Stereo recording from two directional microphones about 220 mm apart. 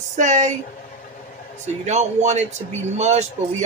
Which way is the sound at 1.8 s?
30° right (ahead or behind).